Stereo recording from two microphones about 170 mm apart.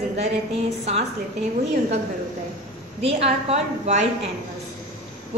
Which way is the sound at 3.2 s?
35° right (ahead or behind).